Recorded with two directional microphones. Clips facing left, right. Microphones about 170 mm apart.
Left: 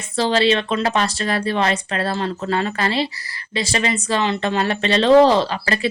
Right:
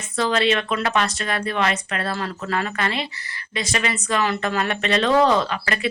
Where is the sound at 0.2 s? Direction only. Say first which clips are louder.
Left 3 dB; 30° left (ahead or behind).